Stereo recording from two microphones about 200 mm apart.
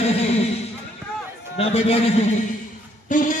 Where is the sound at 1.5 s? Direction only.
30° left (ahead or behind).